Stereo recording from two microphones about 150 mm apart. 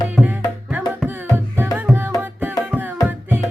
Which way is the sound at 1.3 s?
15° right (ahead or behind).